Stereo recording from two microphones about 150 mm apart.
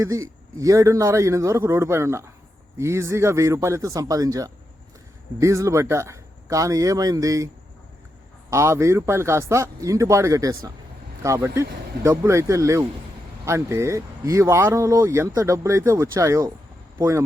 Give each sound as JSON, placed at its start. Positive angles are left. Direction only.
{"t": 0.0, "sound": "speech", "side_deg": -20}